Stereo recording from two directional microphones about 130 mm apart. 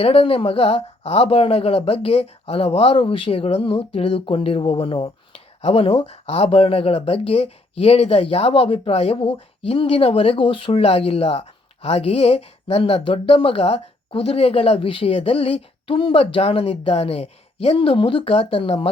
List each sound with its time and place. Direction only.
0.0 s speech: 50° left (ahead or behind)